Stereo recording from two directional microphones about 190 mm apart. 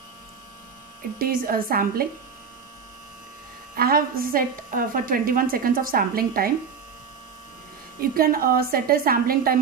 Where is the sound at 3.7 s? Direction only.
50° right (ahead or behind).